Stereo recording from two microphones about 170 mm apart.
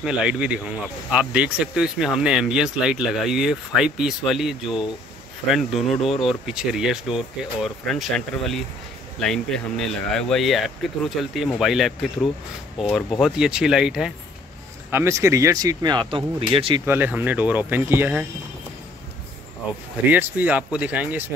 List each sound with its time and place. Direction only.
0.0 s speech: 5° right (ahead or behind)
14.9 s speech: 15° right (ahead or behind); by 16.8 s 30° right (ahead or behind)
16.8 s speech: 10° right (ahead or behind)
20.1 s speech: 10° right (ahead or behind)